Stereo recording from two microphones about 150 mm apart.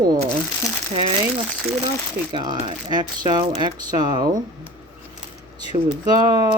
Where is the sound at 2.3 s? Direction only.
35° right (ahead or behind).